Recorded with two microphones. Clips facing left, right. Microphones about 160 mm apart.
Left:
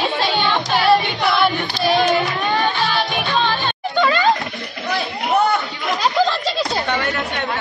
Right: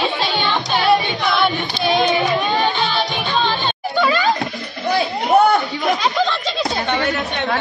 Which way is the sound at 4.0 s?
5° right (ahead or behind).